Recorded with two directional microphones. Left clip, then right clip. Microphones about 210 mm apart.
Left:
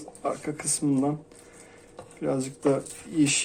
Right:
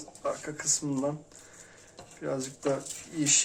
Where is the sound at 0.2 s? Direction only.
35° left (ahead or behind).